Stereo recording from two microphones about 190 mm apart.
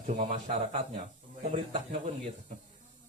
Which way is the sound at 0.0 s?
40° right (ahead or behind).